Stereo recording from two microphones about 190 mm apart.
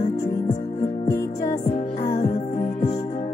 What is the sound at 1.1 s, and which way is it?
Music, 15° left (ahead or behind).